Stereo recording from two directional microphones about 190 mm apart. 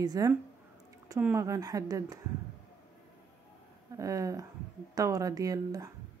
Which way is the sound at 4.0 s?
15° right (ahead or behind).